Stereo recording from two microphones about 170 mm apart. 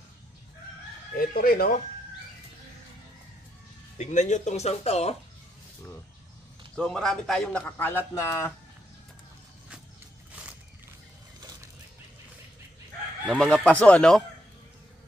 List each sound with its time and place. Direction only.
1.1 s speech: 60° left (ahead or behind)
4.0 s speech: 45° left (ahead or behind)
6.7 s a man's voice: 5° left (ahead or behind)
13.3 s speech: 5° left (ahead or behind)